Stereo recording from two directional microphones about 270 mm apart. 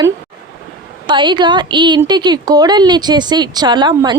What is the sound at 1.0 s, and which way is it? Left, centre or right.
Speech, centre.